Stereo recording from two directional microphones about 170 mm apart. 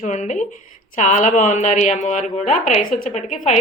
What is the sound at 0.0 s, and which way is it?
A woman's voice, 45° left (ahead or behind).